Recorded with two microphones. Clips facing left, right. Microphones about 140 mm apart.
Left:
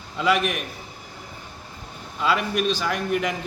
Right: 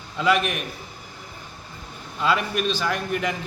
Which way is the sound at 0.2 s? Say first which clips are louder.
Even; centre (ahead or behind).